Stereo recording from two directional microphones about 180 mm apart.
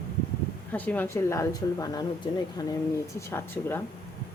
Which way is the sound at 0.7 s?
10° left (ahead or behind).